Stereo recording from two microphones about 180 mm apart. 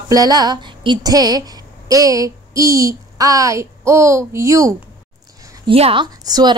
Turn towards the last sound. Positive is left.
turn(degrees=-20)  # may be behind; listen again after turning